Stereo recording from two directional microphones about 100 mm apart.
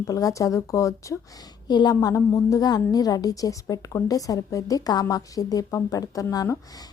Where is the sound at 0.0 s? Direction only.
35° left (ahead or behind).